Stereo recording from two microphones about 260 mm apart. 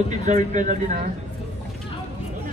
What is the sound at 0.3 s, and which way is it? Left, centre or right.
Speech, right.